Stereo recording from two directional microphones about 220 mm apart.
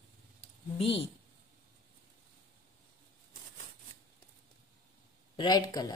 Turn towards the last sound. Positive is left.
turn(degrees=15)  # may be behind; listen again after turning